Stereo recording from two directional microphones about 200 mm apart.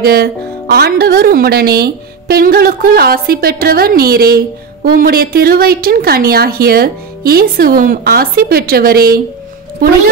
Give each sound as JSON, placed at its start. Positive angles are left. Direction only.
{"t": 0.0, "sound": "speech", "side_deg": -50}